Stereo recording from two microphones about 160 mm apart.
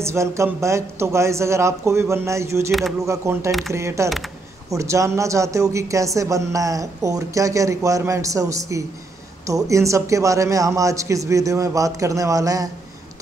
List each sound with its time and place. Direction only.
0.0 s a woman's voice: 15° right (ahead or behind)